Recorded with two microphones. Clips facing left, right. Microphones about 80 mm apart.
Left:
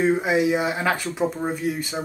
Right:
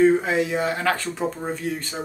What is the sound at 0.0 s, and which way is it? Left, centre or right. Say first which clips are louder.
Speech: right 2 dB; centre.